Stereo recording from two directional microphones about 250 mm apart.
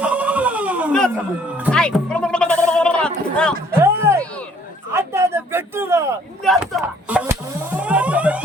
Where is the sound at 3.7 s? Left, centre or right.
Centre.